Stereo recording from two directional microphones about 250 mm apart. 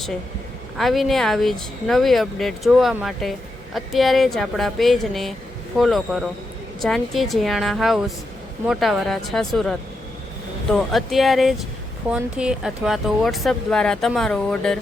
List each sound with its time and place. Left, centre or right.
0.8 s speech: centre